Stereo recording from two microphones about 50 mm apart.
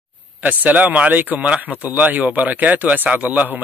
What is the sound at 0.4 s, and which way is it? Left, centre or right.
Speech, right.